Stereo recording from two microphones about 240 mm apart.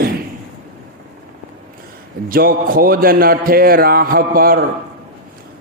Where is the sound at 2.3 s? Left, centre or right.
Right.